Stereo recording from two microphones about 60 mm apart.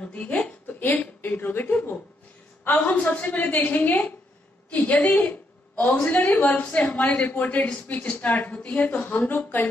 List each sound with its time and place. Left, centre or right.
0.0 s a woman's voice: left
5.2 s a sound: left
6.1 s a woman's voice: left